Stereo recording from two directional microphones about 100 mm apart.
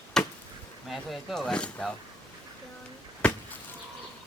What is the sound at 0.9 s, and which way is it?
Speech, centre (ahead or behind).